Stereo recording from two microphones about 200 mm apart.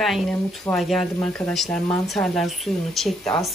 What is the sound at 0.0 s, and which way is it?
Speech, centre (ahead or behind).